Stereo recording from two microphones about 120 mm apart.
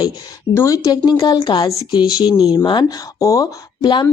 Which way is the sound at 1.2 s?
40° left (ahead or behind).